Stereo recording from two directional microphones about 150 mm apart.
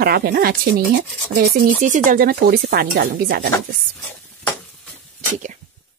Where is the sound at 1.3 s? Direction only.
70° right (ahead or behind).